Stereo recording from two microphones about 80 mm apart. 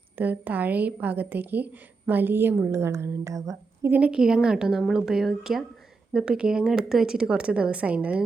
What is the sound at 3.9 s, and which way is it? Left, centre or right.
A woman's voice, centre.